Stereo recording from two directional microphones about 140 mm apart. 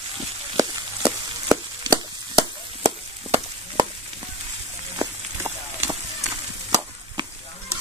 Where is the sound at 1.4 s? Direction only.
25° right (ahead or behind).